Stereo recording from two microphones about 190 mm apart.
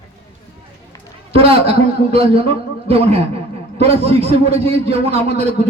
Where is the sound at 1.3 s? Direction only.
30° right (ahead or behind).